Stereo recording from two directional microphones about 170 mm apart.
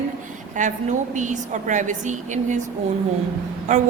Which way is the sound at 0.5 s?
45° right (ahead or behind).